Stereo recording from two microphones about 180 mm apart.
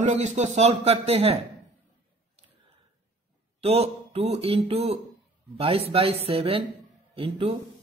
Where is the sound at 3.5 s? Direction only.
35° right (ahead or behind).